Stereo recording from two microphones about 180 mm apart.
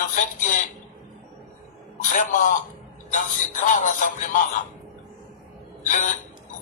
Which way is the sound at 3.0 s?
45° left (ahead or behind).